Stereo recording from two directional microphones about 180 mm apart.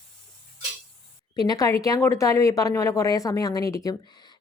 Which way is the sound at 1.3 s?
20° left (ahead or behind).